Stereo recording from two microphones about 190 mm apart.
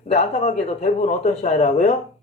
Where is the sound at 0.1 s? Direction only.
35° left (ahead or behind).